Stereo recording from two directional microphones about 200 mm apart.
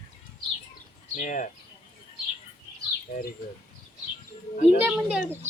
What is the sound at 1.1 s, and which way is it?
Speech, 40° left (ahead or behind).